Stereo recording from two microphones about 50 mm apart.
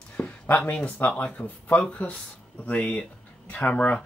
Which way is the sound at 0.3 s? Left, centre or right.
Left.